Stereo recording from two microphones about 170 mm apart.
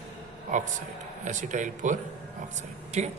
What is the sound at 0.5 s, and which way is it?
Speech, 45° right (ahead or behind).